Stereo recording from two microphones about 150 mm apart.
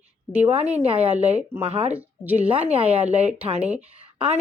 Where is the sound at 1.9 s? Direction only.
10° right (ahead or behind).